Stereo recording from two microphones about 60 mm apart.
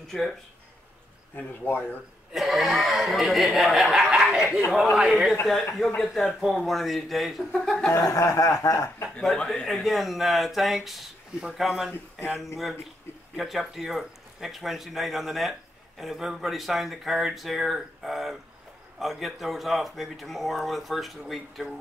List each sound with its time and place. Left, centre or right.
1.3 s speech: left
2.3 s speech: centre
7.9 s chuckle: left
9.2 s speech: centre
9.7 s speech: centre